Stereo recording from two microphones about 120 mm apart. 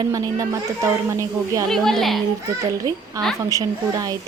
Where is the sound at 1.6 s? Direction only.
5° left (ahead or behind).